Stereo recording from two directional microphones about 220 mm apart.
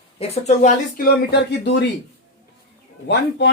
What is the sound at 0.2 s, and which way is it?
Speech, 30° left (ahead or behind).